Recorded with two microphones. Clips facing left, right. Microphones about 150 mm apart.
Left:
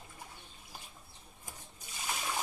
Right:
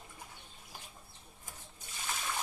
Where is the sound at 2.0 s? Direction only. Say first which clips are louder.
Left 2 dB; 15° left (ahead or behind).